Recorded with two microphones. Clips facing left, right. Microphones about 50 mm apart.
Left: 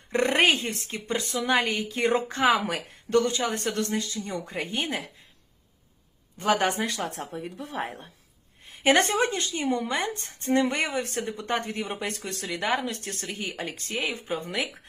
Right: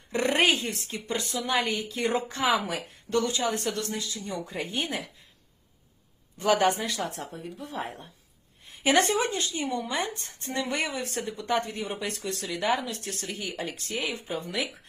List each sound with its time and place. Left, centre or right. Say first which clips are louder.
0.1 s a sound: left 2 dB; left
0.9 s a woman's voice: left 2 dB; left
6.4 s a woman's voice: right 1 dB; left
7.5 s speech: left 1 dB; left
7.8 s a woman's voice: left 3 dB; left